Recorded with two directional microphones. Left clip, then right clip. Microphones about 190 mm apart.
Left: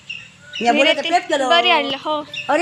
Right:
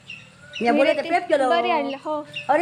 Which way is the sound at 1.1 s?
60° left (ahead or behind).